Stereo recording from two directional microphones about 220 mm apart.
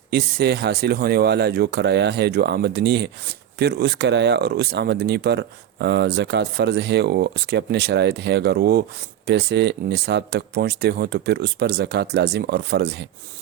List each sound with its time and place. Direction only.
0.1 s speech: 45° right (ahead or behind)